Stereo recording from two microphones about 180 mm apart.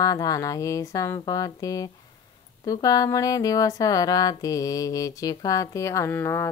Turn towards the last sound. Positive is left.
turn(degrees=15)  # may be behind; listen again after turning